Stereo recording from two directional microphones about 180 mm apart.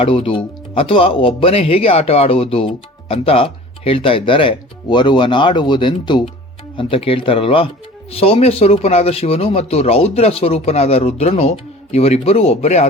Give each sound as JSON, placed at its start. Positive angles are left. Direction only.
{"t": 0.0, "sound": "speech", "side_deg": 30}